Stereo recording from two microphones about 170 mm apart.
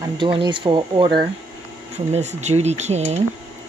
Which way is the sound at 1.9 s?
40° right (ahead or behind).